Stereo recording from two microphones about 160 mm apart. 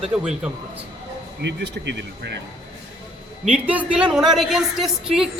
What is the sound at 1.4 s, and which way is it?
Speech, 90° right.